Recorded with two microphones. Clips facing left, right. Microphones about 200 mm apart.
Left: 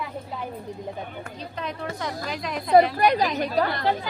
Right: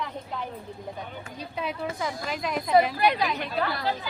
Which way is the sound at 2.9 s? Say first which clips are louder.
Left 3 dB; 45° left (ahead or behind).